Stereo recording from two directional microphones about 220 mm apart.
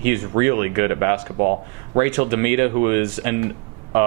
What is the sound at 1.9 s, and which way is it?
Speech, 10° right (ahead or behind).